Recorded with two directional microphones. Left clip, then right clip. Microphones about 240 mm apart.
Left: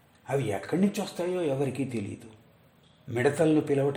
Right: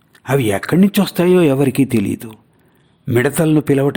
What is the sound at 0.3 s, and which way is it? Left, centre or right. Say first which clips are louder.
Speech: right 13 dB; right.